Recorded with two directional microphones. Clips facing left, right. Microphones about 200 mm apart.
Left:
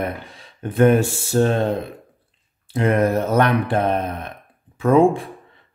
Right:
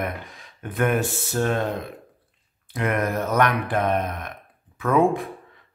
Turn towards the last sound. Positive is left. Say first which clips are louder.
# left 5 dB
turn(degrees=25)  # may be behind; listen again after turning